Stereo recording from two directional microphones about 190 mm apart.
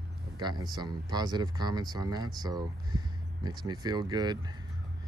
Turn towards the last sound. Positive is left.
turn(degrees=-20)  # may be behind; listen again after turning